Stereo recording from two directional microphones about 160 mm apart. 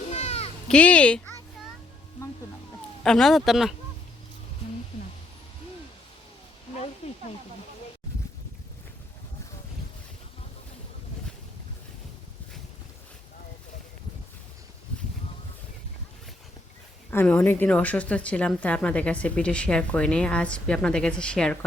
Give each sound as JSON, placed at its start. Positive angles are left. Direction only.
{"t": 0.1, "sound": "children playing", "side_deg": 45}
{"t": 0.7, "sound": "a woman's voice", "side_deg": 10}
{"t": 3.0, "sound": "speech", "side_deg": 5}
{"t": 7.0, "sound": "snake", "side_deg": 40}
{"t": 17.1, "sound": "a woman's voice", "side_deg": 10}